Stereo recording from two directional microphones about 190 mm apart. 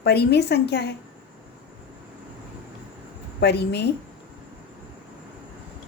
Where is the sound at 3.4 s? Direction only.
60° left (ahead or behind).